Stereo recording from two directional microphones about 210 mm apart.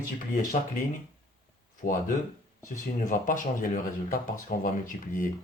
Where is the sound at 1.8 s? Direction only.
40° left (ahead or behind).